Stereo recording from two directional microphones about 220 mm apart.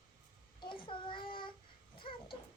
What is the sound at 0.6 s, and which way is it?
Child singing, 20° left (ahead or behind).